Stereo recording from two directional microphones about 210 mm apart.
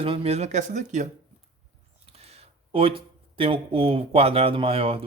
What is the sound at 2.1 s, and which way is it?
Speech, 30° right (ahead or behind).